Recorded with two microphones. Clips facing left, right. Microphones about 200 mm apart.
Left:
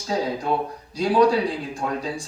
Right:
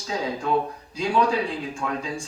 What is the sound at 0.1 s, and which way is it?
A man's voice, 35° left (ahead or behind).